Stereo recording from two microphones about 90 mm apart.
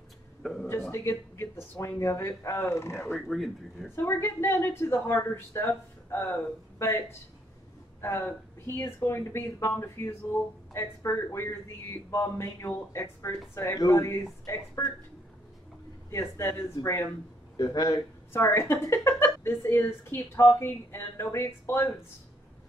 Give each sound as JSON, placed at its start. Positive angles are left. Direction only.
{"t": 0.4, "sound": "speech", "side_deg": 5}
{"t": 0.7, "sound": "speech", "side_deg": 30}
{"t": 3.2, "sound": "speech", "side_deg": 0}
{"t": 3.9, "sound": "speech", "side_deg": 25}
{"t": 13.6, "sound": "speech", "side_deg": 40}
{"t": 16.1, "sound": "speech", "side_deg": 30}
{"t": 17.6, "sound": "a man's voice", "side_deg": 45}
{"t": 18.5, "sound": "speech", "side_deg": 30}